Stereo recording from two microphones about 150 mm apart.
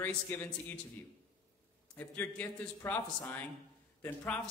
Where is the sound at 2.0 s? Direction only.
10° left (ahead or behind).